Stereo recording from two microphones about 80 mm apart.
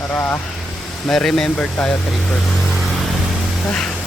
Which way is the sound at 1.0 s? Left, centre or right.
Centre.